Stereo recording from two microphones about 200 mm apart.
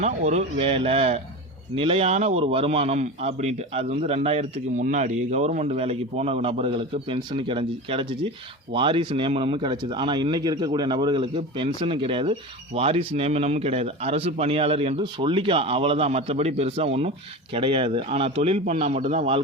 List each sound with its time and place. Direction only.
0.0 s a man's voice: 35° right (ahead or behind)